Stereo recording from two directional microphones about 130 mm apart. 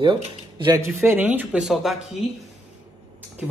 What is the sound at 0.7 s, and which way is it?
Speech, 15° right (ahead or behind).